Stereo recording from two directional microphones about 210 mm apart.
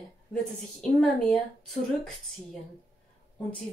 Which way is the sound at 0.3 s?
Centre (ahead or behind).